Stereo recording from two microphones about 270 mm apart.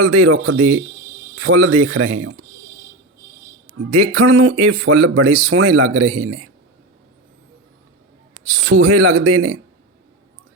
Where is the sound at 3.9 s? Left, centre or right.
Right.